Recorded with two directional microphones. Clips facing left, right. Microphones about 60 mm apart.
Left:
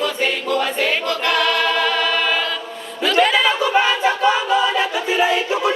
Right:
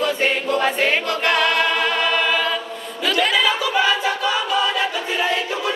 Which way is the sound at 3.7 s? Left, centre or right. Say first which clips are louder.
Left 2 dB; left.